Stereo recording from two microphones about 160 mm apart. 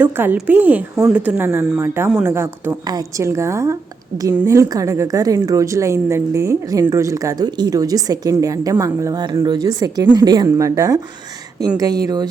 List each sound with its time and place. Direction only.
0.0 s a woman's voice: 10° right (ahead or behind)